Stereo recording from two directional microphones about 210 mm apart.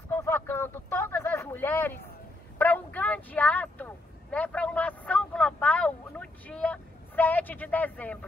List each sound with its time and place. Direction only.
0.1 s vehicle: 10° left (ahead or behind)